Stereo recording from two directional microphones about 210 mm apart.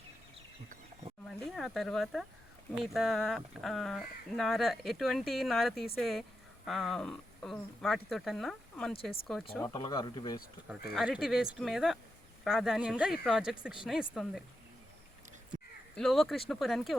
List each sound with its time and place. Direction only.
1.5 s speech: centre (ahead or behind)
9.6 s speech: 20° left (ahead or behind)
10.7 s speech: 5° right (ahead or behind)
16.0 s speech: centre (ahead or behind)